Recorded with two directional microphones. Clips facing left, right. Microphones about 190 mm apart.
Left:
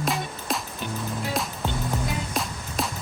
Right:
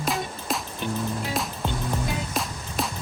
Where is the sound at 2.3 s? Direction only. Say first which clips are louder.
Even; centre (ahead or behind).